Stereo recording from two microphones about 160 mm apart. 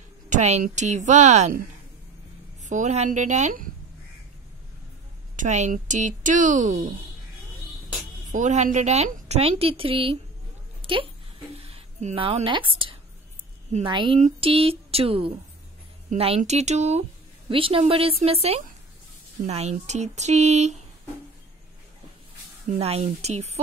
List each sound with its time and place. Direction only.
0.3 s a woman's voice: 45° right (ahead or behind)
2.6 s a woman's voice: 50° right (ahead or behind)
5.3 s a woman's voice: 50° right (ahead or behind)
8.3 s a woman's voice: 50° right (ahead or behind)
10.8 s a sound: 35° right (ahead or behind)
13.8 s a woman's voice: 30° right (ahead or behind)
17.5 s a woman's voice: 35° right (ahead or behind)
22.8 s a woman's voice: 40° right (ahead or behind)